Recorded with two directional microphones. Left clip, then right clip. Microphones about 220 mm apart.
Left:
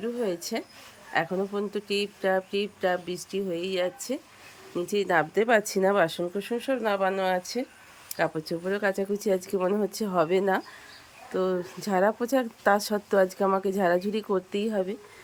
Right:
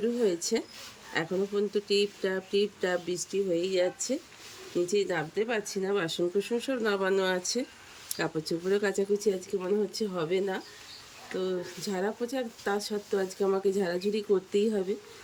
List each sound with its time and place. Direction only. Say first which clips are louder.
0.0 s speech: right 2 dB; 10° left (ahead or behind)